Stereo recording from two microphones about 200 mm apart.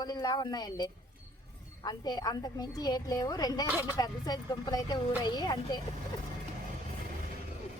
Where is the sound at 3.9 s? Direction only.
20° left (ahead or behind).